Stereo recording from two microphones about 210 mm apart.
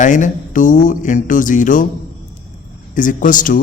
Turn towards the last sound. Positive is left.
turn(degrees=40)  # may be behind; listen again after turning